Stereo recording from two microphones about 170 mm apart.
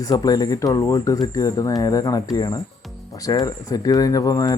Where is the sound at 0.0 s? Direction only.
20° left (ahead or behind).